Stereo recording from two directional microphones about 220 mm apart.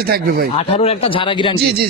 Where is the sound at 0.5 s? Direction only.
25° left (ahead or behind).